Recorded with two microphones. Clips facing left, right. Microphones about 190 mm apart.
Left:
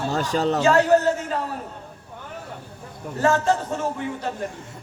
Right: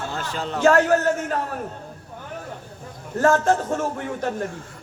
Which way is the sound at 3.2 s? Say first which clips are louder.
Right 2 dB; 50° right (ahead or behind).